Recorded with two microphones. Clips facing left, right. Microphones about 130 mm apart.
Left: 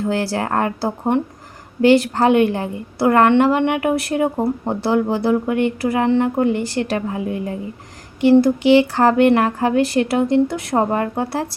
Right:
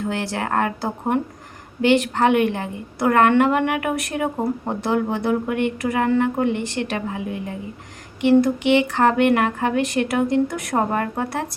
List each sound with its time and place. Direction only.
0.0 s a woman's voice: 35° left (ahead or behind)